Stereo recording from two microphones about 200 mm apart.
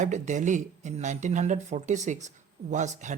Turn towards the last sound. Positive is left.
turn(degrees=-35)  # may be behind; listen again after turning